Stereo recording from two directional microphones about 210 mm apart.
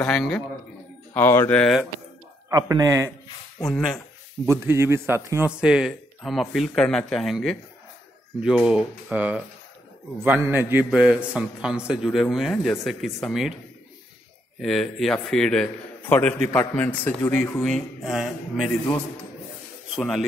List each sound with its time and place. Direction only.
0.0 s a man's voice: 5° left (ahead or behind)
2.5 s a man's voice: 15° right (ahead or behind)
3.6 s a man's voice: centre (ahead or behind)
4.5 s a man's voice: 10° right (ahead or behind)
14.6 s a man's voice: centre (ahead or behind)